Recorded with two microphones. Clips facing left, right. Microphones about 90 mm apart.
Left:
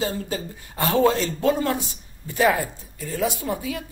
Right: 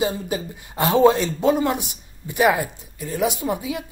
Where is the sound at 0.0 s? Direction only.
15° right (ahead or behind).